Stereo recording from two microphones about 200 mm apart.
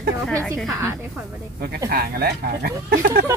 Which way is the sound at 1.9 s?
50° right (ahead or behind).